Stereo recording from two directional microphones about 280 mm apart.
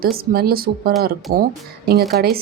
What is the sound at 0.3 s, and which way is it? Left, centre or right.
Speech, right.